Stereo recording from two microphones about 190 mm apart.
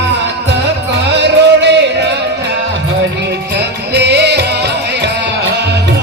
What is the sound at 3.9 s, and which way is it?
Music, 60° right (ahead or behind).